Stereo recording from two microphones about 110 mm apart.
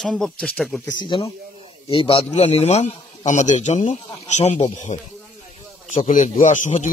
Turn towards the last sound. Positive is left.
turn(degrees=90)